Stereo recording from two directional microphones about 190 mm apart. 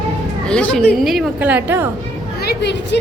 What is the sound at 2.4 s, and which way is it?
Speech, 65° left (ahead or behind).